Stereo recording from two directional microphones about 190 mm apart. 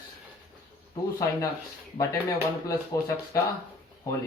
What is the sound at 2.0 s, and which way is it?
Speech, 15° left (ahead or behind).